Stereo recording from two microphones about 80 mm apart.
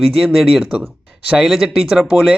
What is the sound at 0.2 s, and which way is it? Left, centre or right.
A man's voice, centre.